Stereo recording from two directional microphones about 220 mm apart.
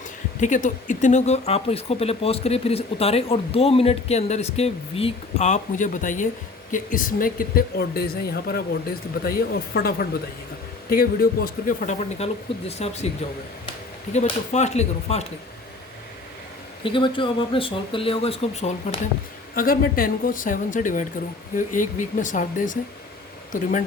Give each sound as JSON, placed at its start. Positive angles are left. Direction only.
{"t": 0.3, "sound": "speech", "side_deg": 35}
{"t": 14.1, "sound": "speech", "side_deg": 30}
{"t": 16.8, "sound": "speech", "side_deg": 20}
{"t": 19.5, "sound": "speech", "side_deg": 40}